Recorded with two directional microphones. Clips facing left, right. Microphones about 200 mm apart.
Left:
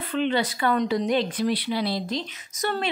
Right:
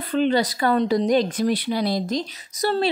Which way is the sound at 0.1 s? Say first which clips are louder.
Right 4 dB; 40° right (ahead or behind).